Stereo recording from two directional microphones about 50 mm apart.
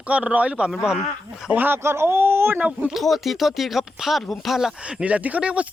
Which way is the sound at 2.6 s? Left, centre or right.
Right.